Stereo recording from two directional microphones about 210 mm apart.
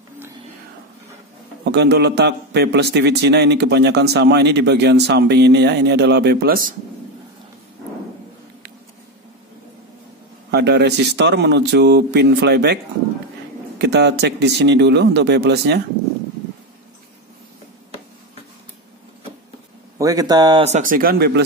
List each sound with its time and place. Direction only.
1.6 s a man's voice: 50° right (ahead or behind)
10.5 s a man's voice: 55° right (ahead or behind)
13.7 s a man's voice: 55° right (ahead or behind)
20.0 s speech: 15° right (ahead or behind)
20.6 s a man's voice: 35° right (ahead or behind)